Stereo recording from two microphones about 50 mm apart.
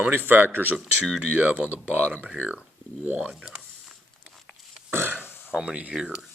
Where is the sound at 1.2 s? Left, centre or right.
Right.